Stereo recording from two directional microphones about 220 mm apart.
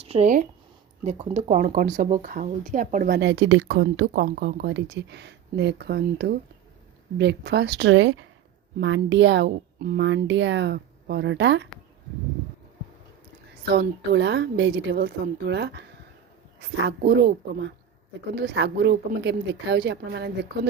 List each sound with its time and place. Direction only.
0.0 s speech: 30° right (ahead or behind); by 11.7 s 55° right (ahead or behind)
13.7 s speech: 50° right (ahead or behind)